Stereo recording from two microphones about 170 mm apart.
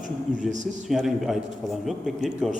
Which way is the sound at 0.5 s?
45° right (ahead or behind).